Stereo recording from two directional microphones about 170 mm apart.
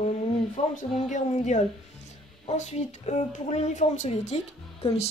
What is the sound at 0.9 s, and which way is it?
Speech, 45° left (ahead or behind).